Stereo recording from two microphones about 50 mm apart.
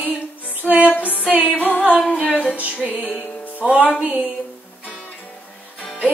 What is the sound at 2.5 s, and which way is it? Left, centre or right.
Music, right.